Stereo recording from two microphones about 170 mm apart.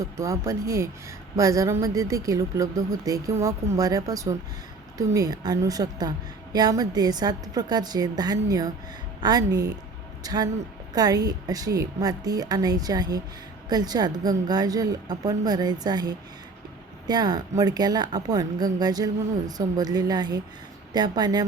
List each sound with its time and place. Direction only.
0.0 s a woman's voice: 15° right (ahead or behind)